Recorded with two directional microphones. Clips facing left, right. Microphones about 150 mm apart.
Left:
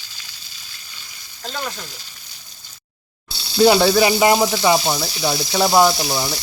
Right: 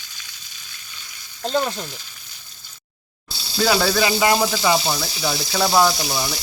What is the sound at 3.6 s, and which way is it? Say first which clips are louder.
Speech: left 5 dB; 20° left (ahead or behind).